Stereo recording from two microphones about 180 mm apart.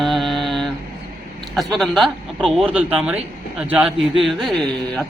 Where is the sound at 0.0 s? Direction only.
Centre (ahead or behind).